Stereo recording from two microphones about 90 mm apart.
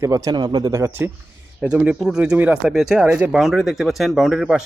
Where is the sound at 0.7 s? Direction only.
35° right (ahead or behind).